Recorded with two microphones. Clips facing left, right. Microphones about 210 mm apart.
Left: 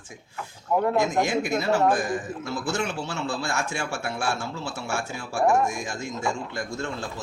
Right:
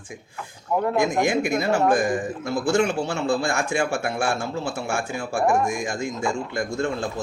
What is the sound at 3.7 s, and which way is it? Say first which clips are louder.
Speech: right 7 dB; 50° right (ahead or behind).